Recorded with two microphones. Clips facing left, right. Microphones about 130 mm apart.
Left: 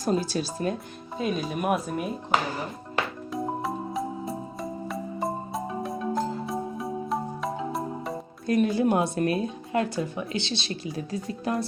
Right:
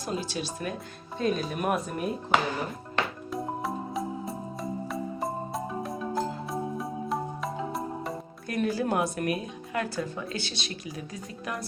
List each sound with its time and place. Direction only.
0.0 s speech: 40° left (ahead or behind)
1.2 s speech: 5° left (ahead or behind)
2.9 s music: centre (ahead or behind)
8.4 s speech: 20° left (ahead or behind)